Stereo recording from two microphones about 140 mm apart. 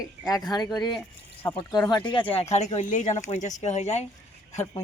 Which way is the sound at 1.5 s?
30° left (ahead or behind).